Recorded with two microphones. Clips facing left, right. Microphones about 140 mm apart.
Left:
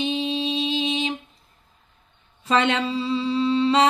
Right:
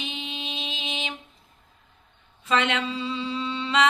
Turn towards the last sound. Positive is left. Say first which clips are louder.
# left 6 dB
turn(degrees=35)  # may be behind; listen again after turning